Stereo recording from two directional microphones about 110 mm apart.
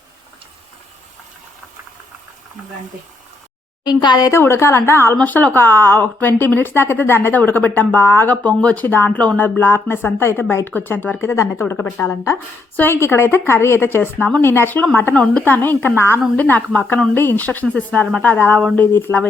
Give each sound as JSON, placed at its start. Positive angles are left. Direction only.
{"t": 3.8, "sound": "a woman's voice", "side_deg": 40}
{"t": 4.3, "sound": "a woman's voice", "side_deg": 25}